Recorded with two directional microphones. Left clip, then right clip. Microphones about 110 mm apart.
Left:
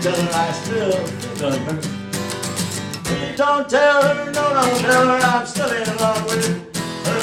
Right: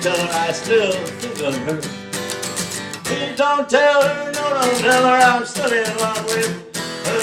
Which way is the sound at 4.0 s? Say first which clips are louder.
Left 1 dB; 45° right (ahead or behind).